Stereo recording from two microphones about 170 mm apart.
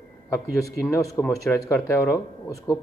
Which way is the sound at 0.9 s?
15° left (ahead or behind).